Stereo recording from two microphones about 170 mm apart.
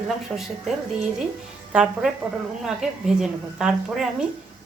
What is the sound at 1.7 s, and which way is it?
Speech, 5° right (ahead or behind).